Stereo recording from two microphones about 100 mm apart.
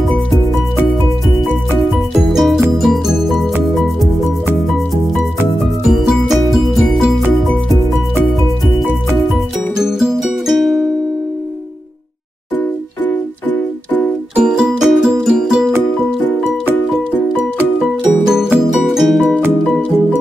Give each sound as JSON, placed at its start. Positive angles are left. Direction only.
{"t": 2.2, "sound": "music", "side_deg": 0}
{"t": 9.8, "sound": "music", "side_deg": -5}
{"t": 14.3, "sound": "music", "side_deg": -10}
{"t": 18.2, "sound": "music", "side_deg": -5}